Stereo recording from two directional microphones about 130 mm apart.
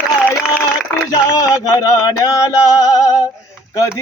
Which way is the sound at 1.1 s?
25° left (ahead or behind).